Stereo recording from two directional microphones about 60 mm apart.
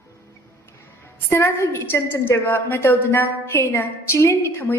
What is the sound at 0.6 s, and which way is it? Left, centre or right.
A woman's voice, left.